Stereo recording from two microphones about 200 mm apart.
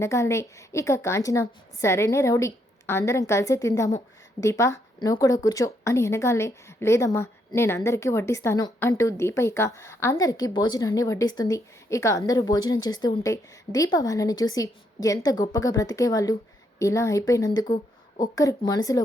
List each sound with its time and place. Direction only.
0.0 s speech: 15° left (ahead or behind)